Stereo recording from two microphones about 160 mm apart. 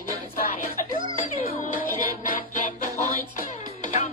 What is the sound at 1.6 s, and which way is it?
Music, 55° left (ahead or behind).